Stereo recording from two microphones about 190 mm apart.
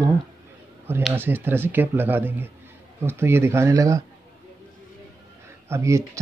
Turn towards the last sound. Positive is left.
turn(degrees=-15)  # may be behind; listen again after turning